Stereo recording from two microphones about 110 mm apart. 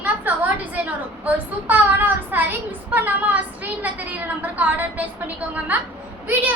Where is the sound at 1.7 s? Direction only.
15° right (ahead or behind).